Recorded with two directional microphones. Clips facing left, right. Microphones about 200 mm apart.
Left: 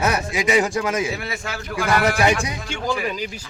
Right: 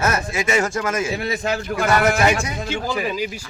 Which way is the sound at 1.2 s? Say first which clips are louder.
Right 7 dB; 20° right (ahead or behind).